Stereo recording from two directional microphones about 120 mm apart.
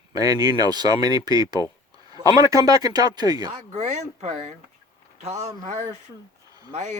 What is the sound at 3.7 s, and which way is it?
Speech, 75° right (ahead or behind).